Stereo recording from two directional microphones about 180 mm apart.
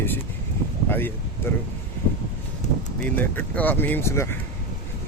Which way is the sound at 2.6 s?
40° left (ahead or behind).